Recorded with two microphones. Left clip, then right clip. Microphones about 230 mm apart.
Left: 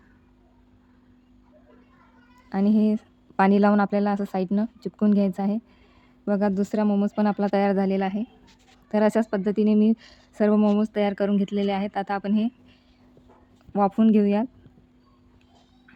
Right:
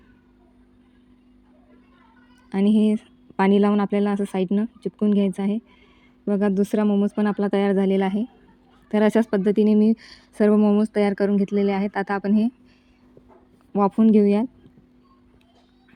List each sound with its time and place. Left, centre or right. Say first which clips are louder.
2.5 s a woman's voice: right 2 dB; centre
13.7 s a woman's voice: right 2 dB; centre